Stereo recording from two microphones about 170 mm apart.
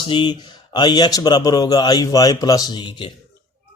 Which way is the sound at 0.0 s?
30° left (ahead or behind).